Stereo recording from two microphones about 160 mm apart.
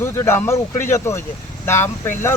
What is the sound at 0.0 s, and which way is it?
Speech, 15° left (ahead or behind).